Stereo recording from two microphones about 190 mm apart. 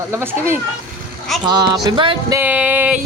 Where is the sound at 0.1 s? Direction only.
15° right (ahead or behind).